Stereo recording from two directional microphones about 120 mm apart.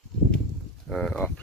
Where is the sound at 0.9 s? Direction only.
5° left (ahead or behind).